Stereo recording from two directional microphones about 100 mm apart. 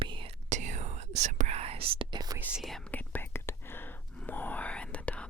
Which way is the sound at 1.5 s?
85° right.